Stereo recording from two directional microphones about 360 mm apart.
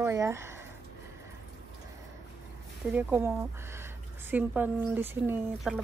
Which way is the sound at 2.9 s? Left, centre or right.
Centre.